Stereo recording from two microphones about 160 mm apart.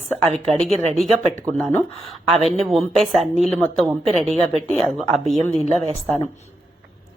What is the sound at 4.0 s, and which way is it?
Speech, 40° right (ahead or behind).